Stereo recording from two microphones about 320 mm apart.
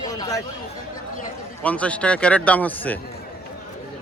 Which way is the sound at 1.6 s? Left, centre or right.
Centre.